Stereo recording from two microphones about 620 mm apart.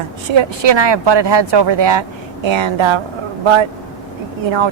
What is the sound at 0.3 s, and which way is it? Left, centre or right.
Speech, right.